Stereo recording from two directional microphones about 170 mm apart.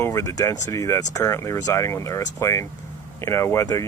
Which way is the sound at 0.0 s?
15° left (ahead or behind).